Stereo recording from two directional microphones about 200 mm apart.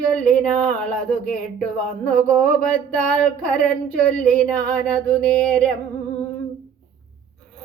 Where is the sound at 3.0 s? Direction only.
5° left (ahead or behind).